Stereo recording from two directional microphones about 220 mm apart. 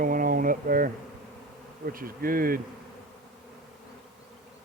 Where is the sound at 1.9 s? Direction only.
40° right (ahead or behind).